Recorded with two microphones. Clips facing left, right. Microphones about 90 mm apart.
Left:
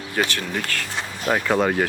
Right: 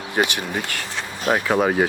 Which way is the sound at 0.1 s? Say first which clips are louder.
Right 2 dB; 20° right (ahead or behind).